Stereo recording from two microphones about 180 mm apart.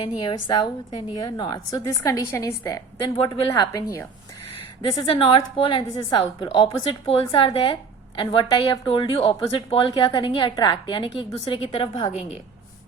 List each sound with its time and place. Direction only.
0.0 s a woman's voice: 25° left (ahead or behind)